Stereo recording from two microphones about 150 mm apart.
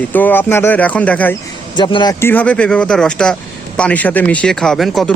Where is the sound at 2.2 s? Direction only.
15° left (ahead or behind).